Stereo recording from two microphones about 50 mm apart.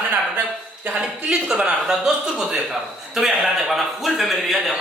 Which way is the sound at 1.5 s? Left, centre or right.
Centre.